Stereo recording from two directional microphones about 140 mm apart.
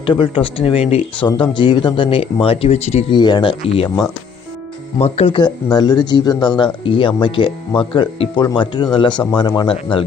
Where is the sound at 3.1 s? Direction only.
35° left (ahead or behind).